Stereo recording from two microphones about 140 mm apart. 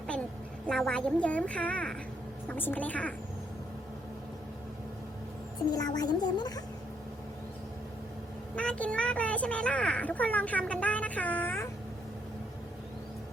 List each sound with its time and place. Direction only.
0.7 s speech: 5° left (ahead or behind)
5.7 s speech: 25° left (ahead or behind)
8.5 s speech: 10° left (ahead or behind)